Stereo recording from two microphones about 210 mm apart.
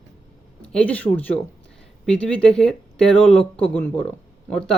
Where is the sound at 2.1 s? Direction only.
5° left (ahead or behind).